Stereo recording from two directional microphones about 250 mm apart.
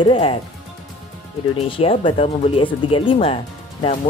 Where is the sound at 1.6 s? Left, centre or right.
Left.